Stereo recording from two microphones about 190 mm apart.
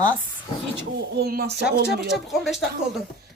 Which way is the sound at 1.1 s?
55° right (ahead or behind).